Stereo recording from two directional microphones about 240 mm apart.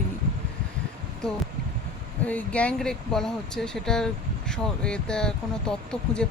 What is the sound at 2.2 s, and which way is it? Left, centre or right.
Speech, centre.